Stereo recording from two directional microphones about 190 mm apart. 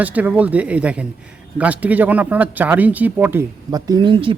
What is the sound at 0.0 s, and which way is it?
Speech, 10° right (ahead or behind).